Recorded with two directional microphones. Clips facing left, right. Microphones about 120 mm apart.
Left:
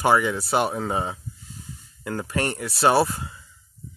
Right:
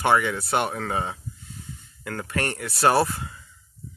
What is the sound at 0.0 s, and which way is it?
Speech, 30° left (ahead or behind).